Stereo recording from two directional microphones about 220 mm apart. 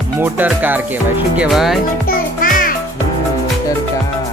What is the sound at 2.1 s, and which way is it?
Music, 40° left (ahead or behind).